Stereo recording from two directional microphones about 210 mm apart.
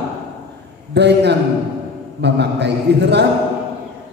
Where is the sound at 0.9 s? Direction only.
55° right (ahead or behind).